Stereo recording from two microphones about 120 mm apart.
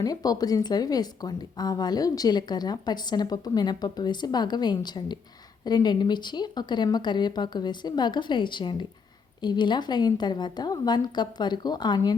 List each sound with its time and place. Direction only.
0.0 s a woman's voice: 30° left (ahead or behind)